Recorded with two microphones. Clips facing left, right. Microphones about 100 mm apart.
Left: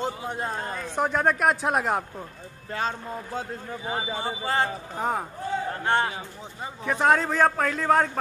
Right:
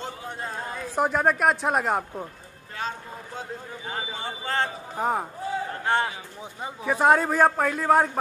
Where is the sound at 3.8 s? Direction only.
10° left (ahead or behind).